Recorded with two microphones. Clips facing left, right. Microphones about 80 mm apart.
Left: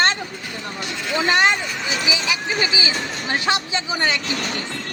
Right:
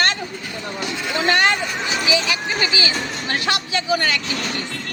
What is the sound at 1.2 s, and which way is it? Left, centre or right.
Speech, centre.